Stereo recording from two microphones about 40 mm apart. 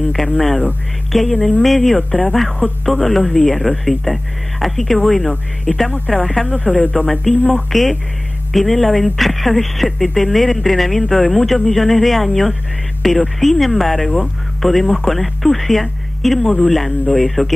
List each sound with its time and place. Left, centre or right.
0.2 s speech: centre
5.7 s speech: centre
6.4 s speech: left
7.1 s speech: centre